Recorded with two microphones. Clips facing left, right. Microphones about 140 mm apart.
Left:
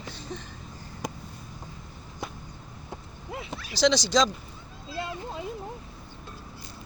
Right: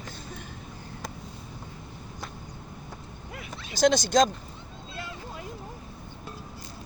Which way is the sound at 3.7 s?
50° right (ahead or behind).